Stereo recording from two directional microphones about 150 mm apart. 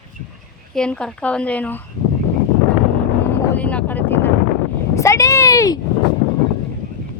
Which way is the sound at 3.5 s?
10° left (ahead or behind).